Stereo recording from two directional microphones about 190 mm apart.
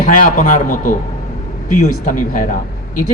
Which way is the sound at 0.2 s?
45° left (ahead or behind).